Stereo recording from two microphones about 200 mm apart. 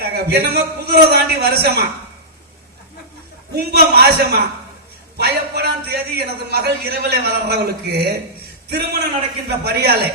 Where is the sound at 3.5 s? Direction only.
50° right (ahead or behind).